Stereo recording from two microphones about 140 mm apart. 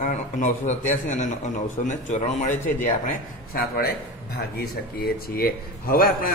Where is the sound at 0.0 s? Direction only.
60° left (ahead or behind).